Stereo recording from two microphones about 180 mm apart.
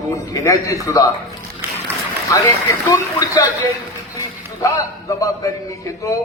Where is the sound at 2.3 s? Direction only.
15° left (ahead or behind).